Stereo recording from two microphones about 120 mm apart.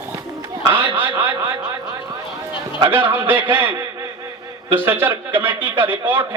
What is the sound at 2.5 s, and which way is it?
A man's voice, 20° right (ahead or behind).